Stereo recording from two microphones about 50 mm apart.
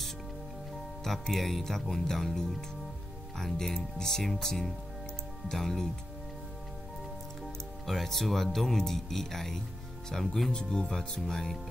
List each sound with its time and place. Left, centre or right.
1.3 s speech: centre
7.8 s speech: centre
10.5 s speech: centre